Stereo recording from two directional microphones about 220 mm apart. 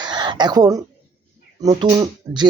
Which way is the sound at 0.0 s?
20° right (ahead or behind).